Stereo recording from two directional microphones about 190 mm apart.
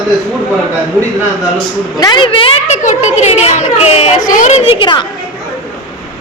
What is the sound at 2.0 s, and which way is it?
A child's voice, 25° left (ahead or behind).